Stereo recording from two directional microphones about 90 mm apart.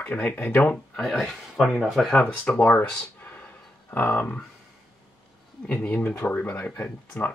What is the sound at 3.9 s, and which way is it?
Speech, 20° left (ahead or behind).